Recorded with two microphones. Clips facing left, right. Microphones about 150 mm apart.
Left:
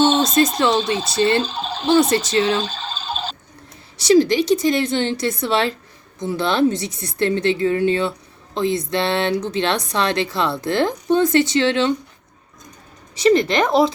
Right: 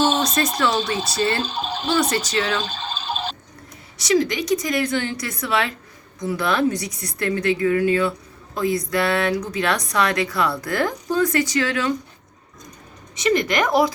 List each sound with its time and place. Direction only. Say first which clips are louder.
0.1 s a sound: left 5 dB; 25° left (ahead or behind)
0.5 s a woman's voice: left 3 dB; 25° left (ahead or behind)
4.0 s a woman's voice: left 6 dB; 30° left (ahead or behind)
13.1 s a woman's voice: left 4 dB; 30° left (ahead or behind)